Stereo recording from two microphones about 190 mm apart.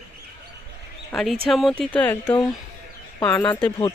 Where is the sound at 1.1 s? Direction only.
Centre (ahead or behind).